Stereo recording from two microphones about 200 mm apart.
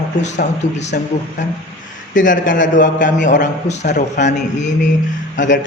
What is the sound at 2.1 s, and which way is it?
A man's voice, 40° left (ahead or behind).